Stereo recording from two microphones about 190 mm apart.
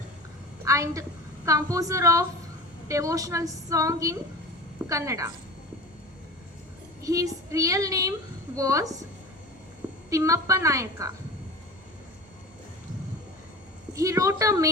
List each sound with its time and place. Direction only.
0.6 s a woman's voice: 15° right (ahead or behind)
7.0 s a woman's voice: 15° right (ahead or behind)
10.1 s a woman's voice: 15° right (ahead or behind)
13.9 s a woman's voice: 15° right (ahead or behind)